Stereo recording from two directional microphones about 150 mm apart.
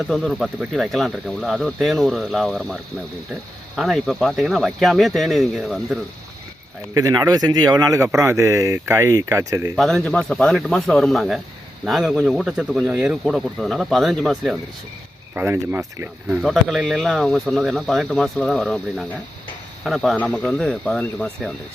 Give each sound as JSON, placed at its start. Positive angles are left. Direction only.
{"t": 0.1, "sound": "speech", "side_deg": 0}
{"t": 3.8, "sound": "speech", "side_deg": 0}
{"t": 6.9, "sound": "a man's voice", "side_deg": -25}
{"t": 9.7, "sound": "speech", "side_deg": 0}
{"t": 15.4, "sound": "speech", "side_deg": -15}
{"t": 16.4, "sound": "speech", "side_deg": 0}